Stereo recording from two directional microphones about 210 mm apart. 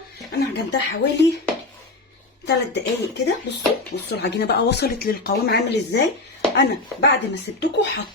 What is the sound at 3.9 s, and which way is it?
Speech, 55° left (ahead or behind).